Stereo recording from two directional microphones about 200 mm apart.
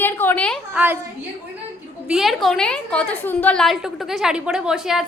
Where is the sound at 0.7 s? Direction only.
10° right (ahead or behind).